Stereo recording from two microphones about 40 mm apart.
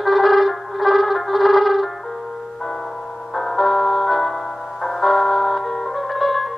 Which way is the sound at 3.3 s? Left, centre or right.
Centre.